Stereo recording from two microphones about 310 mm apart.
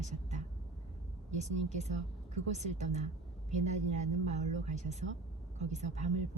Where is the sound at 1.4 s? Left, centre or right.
Right.